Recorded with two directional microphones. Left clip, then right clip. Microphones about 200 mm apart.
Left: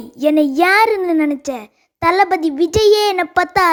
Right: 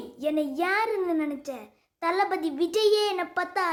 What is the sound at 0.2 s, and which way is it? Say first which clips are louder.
A child's voice: left 14 dB; 45° left (ahead or behind).